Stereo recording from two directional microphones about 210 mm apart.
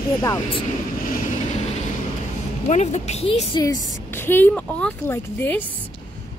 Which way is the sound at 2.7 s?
35° left (ahead or behind).